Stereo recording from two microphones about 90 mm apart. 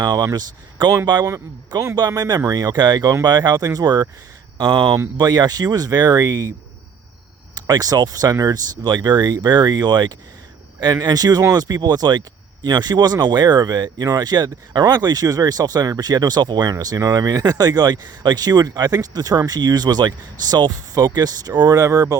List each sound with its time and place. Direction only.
0.0 s speech: 50° right (ahead or behind)
7.5 s speech: 45° right (ahead or behind)